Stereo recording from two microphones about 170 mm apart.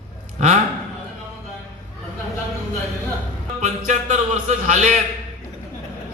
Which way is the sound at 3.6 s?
45° right (ahead or behind).